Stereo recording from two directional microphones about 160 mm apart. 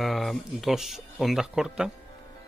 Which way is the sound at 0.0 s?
Centre (ahead or behind).